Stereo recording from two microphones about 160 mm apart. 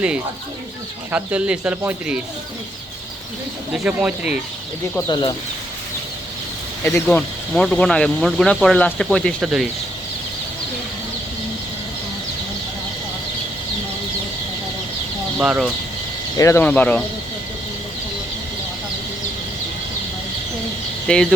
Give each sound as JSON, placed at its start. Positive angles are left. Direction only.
{"t": 1.1, "sound": "speech", "side_deg": -10}
{"t": 3.7, "sound": "speech", "side_deg": -5}
{"t": 5.0, "sound": "speech", "side_deg": 25}
{"t": 6.8, "sound": "speech", "side_deg": 5}
{"t": 15.4, "sound": "speech", "side_deg": -5}
{"t": 16.4, "sound": "speech", "side_deg": 15}
{"t": 21.1, "sound": "speech", "side_deg": 5}